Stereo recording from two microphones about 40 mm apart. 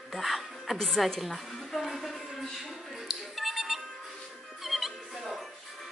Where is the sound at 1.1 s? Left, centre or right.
Centre.